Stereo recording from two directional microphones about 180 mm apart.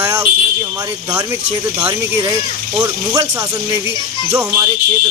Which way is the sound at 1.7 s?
20° right (ahead or behind).